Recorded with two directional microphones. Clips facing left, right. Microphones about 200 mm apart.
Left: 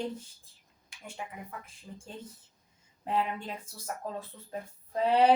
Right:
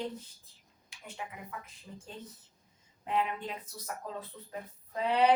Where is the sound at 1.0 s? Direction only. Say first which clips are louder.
Left 2 dB; 30° left (ahead or behind).